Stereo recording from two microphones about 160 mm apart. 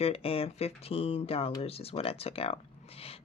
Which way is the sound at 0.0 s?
35° left (ahead or behind).